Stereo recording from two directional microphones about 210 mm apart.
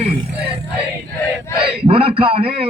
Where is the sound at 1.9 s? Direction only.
25° right (ahead or behind).